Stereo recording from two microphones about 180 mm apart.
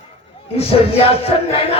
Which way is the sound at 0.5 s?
35° left (ahead or behind).